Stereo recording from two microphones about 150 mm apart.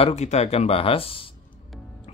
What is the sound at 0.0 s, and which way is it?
Speech, 50° left (ahead or behind).